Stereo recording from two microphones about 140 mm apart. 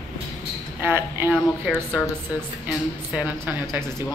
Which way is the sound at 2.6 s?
10° right (ahead or behind).